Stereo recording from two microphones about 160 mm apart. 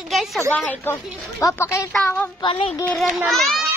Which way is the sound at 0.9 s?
20° left (ahead or behind).